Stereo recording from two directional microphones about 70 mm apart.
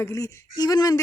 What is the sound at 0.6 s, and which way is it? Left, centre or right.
Speech, left.